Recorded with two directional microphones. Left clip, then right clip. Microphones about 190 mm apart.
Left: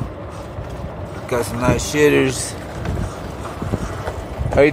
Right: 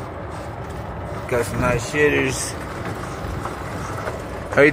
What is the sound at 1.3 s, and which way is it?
Speech, 10° left (ahead or behind).